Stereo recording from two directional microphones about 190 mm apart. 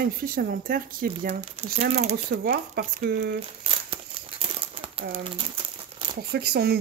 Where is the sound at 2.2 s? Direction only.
55° right (ahead or behind).